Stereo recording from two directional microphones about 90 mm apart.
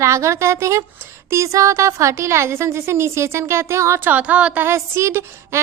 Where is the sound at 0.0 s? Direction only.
35° right (ahead or behind).